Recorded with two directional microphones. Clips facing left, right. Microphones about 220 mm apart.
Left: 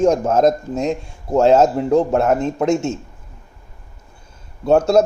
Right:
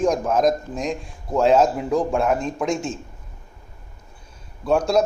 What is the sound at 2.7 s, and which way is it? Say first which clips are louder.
Speech: left 6 dB; 25° left (ahead or behind).